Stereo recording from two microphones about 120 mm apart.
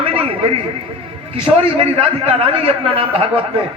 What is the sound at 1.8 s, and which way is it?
A man's voice, 55° right (ahead or behind).